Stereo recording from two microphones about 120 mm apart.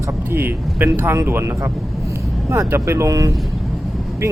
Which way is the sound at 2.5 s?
25° right (ahead or behind).